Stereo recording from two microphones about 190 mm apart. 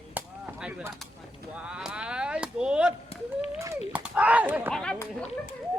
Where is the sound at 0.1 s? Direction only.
10° right (ahead or behind).